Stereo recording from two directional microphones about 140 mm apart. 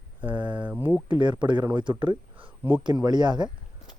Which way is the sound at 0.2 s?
10° right (ahead or behind).